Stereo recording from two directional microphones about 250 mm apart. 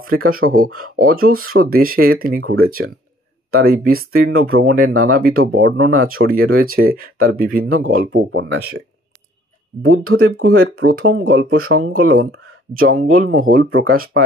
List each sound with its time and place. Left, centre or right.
0.0 s speech: right
4.4 s speech: right
5.0 s speech: right
5.6 s speech: right
5.9 s speech: right
7.6 s speech: right
7.9 s speech: right
9.8 s speech: right
12.8 s speech: right